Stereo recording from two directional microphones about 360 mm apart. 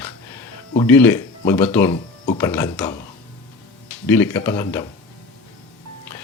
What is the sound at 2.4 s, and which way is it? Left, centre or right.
Speech, centre.